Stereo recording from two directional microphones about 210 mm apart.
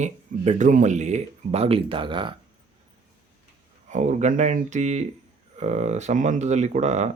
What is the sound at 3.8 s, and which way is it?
Speech, 35° right (ahead or behind).